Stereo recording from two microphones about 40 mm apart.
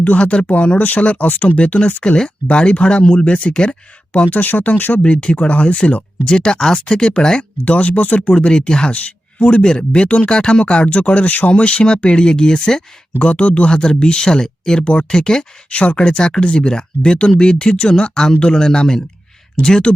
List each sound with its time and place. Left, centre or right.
0.0 s speech: left
1.5 s speech: left
4.3 s speech: left
5.0 s speech: left
7.6 s speech: left
8.3 s speech: left
9.0 s a sound: left
9.6 s speech: left
13.1 s speech: left
15.7 s speech: left
16.0 s speech: centre